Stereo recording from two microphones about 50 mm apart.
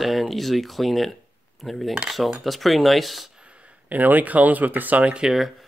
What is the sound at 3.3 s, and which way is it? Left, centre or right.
Speech, right.